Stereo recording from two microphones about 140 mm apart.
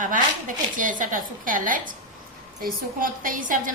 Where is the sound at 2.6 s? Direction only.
90° right; by 3.7 s 75° right (ahead or behind).